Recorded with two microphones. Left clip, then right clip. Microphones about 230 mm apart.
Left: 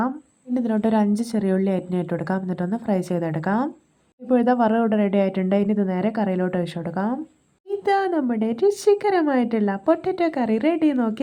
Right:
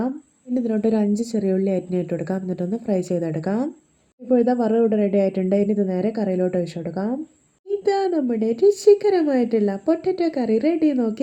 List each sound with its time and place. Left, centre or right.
0.5 s a woman's voice: centre